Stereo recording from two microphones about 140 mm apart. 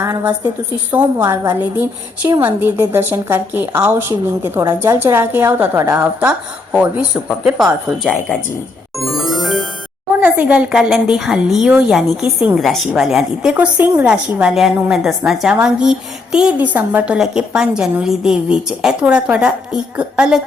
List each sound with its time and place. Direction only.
0.0 s a woman's voice: 15° right (ahead or behind)
1.2 s a woman's voice: 25° right (ahead or behind); by 8.1 s 5° right (ahead or behind)
9.0 s music: centre (ahead or behind)
10.1 s a woman's voice: 10° right (ahead or behind)